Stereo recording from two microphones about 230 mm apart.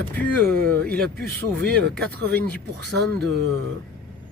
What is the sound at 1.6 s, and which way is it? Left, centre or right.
Speech, centre.